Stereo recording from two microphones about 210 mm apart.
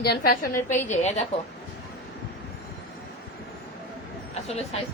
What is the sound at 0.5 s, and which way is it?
Speech, 10° left (ahead or behind).